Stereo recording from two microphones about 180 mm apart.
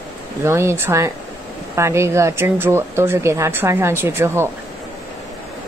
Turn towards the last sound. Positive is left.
turn(degrees=-15)  # may be behind; listen again after turning